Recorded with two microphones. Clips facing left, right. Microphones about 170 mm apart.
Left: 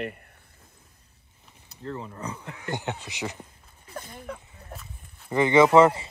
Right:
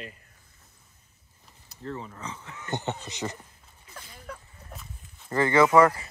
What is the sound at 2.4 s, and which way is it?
Speech, 60° left (ahead or behind).